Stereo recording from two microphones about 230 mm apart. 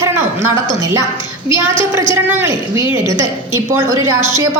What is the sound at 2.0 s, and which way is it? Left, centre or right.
A woman's voice, centre.